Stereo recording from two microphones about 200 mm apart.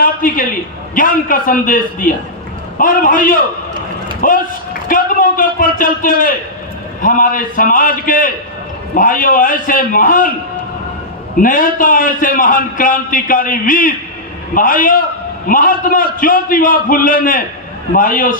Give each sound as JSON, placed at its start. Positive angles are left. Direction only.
{"t": 0.0, "sound": "a sound", "side_deg": 45}
{"t": 0.9, "sound": "a man's voice", "side_deg": 45}
{"t": 11.3, "sound": "a man's voice", "side_deg": 45}